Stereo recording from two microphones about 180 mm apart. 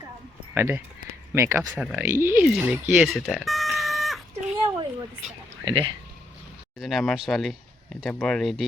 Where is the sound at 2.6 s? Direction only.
10° right (ahead or behind).